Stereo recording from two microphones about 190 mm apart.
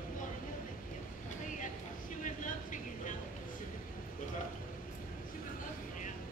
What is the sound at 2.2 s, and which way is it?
Vehicle, 45° left (ahead or behind).